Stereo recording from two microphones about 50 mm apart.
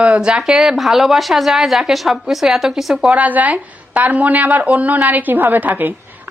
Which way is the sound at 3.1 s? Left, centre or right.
Right.